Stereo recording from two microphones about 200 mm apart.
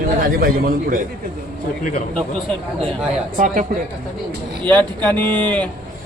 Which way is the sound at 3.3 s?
40° right (ahead or behind).